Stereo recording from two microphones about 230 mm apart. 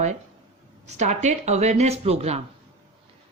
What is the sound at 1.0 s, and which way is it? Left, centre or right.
Speech, right.